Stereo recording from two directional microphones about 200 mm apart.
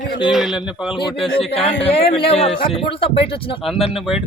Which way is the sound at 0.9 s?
25° left (ahead or behind).